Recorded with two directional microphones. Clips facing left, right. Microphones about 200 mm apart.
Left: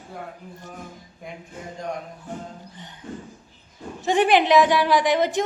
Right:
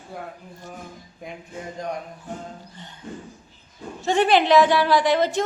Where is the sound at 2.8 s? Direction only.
15° left (ahead or behind).